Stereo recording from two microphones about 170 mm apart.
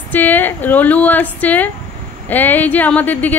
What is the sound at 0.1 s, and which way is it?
A woman's voice, 10° left (ahead or behind).